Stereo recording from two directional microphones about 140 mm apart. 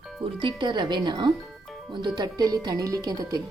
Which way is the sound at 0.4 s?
35° right (ahead or behind).